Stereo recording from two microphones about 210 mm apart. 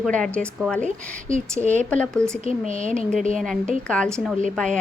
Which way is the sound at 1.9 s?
5° left (ahead or behind).